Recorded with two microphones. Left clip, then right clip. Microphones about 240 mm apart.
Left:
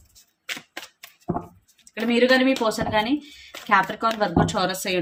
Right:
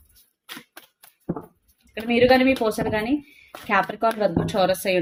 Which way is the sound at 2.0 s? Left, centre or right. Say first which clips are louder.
Right 1 dB; centre.